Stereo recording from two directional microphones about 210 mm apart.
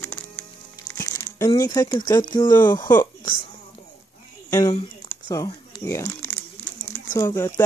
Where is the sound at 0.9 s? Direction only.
15° left (ahead or behind).